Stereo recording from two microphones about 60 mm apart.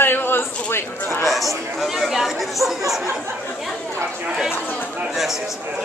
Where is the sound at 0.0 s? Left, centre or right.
Left.